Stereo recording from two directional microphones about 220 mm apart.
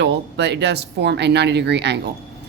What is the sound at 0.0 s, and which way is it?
Speech, 50° right (ahead or behind).